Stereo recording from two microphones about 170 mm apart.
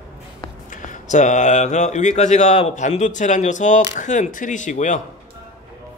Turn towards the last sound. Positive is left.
turn(degrees=45)  # may be behind; listen again after turning